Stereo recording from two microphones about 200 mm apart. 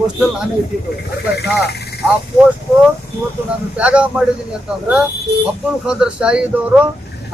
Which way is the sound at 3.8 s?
5° right (ahead or behind).